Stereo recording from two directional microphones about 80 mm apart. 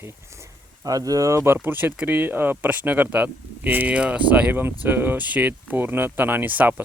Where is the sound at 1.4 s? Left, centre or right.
Right.